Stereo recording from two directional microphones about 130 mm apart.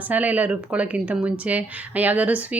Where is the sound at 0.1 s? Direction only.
10° right (ahead or behind).